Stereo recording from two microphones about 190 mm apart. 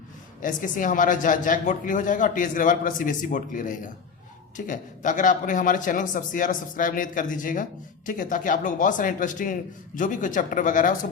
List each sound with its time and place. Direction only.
0.4 s a man's voice: 45° left (ahead or behind)